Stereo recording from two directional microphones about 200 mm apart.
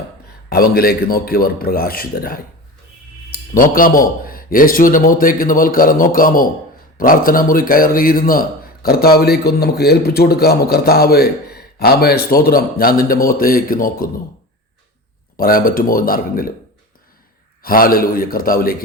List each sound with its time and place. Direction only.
0.5 s speech: 50° left (ahead or behind)
3.5 s speech: 45° left (ahead or behind)
15.4 s speech: 45° left (ahead or behind)
17.6 s speech: 45° left (ahead or behind)